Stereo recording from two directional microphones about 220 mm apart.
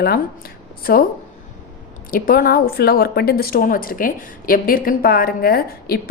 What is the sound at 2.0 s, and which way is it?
Speech, 40° left (ahead or behind).